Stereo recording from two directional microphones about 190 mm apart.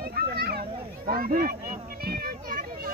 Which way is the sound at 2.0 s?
50° right (ahead or behind).